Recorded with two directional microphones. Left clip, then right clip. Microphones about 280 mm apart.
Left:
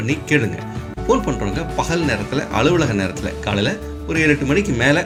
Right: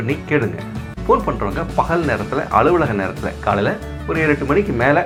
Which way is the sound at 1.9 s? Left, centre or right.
Left.